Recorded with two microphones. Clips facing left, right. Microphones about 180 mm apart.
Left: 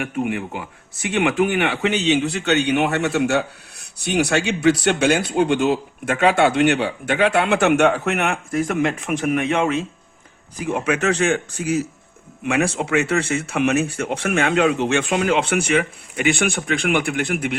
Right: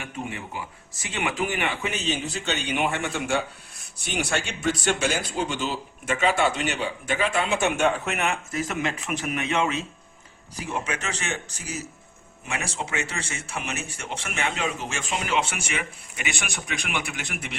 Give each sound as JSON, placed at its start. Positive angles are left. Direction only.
{"t": 0.0, "sound": "speech", "side_deg": 65}